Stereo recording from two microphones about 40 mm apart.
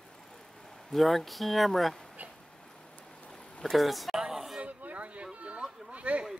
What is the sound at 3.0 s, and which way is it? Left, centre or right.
Vehicle, left.